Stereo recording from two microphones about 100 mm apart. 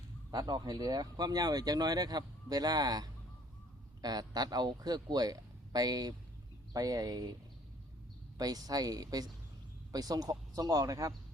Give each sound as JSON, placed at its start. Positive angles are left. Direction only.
{"t": 0.3, "sound": "speech", "side_deg": -40}
{"t": 8.4, "sound": "speech", "side_deg": -40}